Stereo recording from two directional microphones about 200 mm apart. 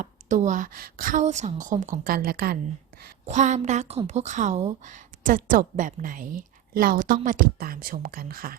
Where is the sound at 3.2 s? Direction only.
35° right (ahead or behind).